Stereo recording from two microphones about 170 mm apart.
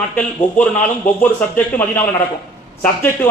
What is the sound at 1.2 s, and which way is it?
A man's voice, 10° left (ahead or behind).